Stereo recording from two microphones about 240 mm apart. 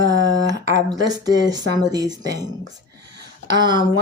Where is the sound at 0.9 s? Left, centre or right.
Centre.